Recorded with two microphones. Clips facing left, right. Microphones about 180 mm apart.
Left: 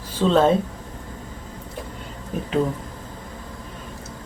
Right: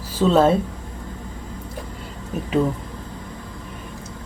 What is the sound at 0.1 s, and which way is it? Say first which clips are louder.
Speech: right 1 dB; 5° right (ahead or behind).